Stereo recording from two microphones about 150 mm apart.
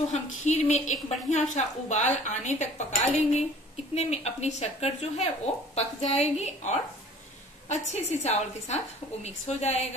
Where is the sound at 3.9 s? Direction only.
45° left (ahead or behind).